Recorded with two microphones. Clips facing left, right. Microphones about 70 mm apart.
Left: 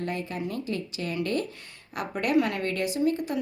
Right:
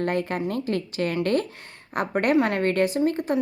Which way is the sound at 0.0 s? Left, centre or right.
Right.